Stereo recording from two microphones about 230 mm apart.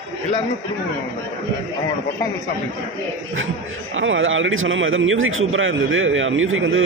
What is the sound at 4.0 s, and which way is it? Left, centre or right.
A man's voice, right.